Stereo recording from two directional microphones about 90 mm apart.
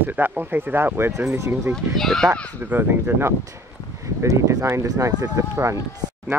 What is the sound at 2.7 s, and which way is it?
Speech, 20° right (ahead or behind).